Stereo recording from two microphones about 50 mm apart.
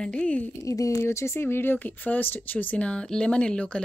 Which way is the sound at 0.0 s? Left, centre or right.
Left.